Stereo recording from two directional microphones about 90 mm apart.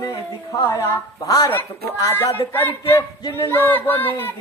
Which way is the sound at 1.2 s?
45° left (ahead or behind).